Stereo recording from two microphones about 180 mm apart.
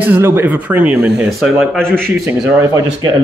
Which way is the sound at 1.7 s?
5° left (ahead or behind).